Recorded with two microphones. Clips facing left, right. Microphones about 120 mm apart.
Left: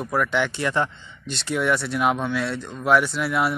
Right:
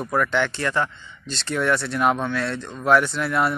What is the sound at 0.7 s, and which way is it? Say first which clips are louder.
Speech: even; 20° left (ahead or behind).